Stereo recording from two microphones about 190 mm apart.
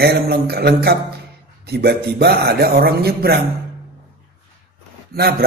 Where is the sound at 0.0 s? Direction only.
55° right (ahead or behind).